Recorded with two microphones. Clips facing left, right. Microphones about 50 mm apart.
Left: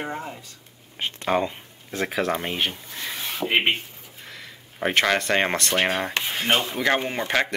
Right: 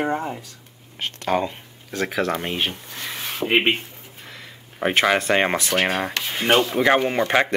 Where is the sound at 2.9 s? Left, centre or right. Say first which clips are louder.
Right 1 dB; right.